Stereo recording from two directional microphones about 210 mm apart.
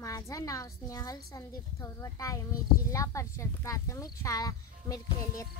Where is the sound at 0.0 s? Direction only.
15° left (ahead or behind).